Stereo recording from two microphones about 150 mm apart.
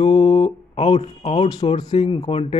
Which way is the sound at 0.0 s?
40° left (ahead or behind).